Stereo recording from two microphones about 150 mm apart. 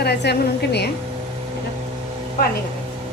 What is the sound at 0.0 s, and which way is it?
Speech, 90° left.